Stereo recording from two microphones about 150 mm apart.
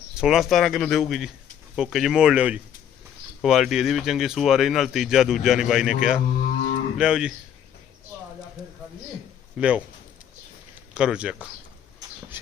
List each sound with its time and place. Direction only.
0.2 s speech: centre (ahead or behind)
9.6 s speech: 10° right (ahead or behind)
10.9 s speech: 5° right (ahead or behind)